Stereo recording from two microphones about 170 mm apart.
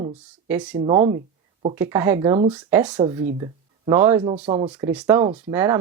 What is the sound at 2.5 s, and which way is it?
Speech, 10° right (ahead or behind).